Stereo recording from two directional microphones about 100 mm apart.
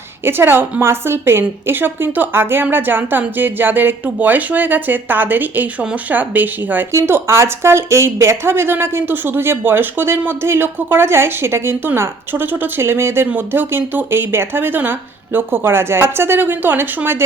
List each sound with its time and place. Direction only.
0.3 s a woman's voice: 25° right (ahead or behind)